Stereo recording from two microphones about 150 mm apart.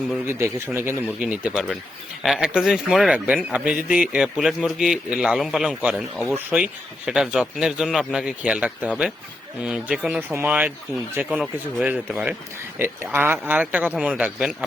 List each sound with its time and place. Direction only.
0.3 s speech: 15° right (ahead or behind)